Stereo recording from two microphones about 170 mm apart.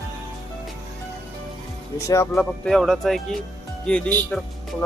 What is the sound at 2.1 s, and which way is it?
Speech, 15° left (ahead or behind).